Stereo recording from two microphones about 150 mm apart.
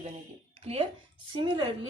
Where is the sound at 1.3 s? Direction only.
35° right (ahead or behind).